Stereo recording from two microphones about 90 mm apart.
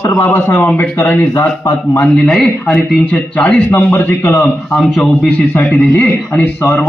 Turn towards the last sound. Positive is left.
turn(degrees=20)  # may be behind; listen again after turning